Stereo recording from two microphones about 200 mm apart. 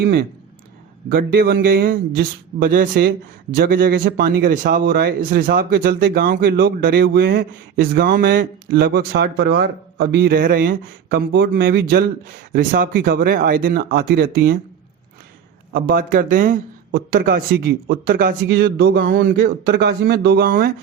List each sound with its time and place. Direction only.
0.0 s a man's voice: 50° right (ahead or behind)
15.7 s a man's voice: 45° right (ahead or behind)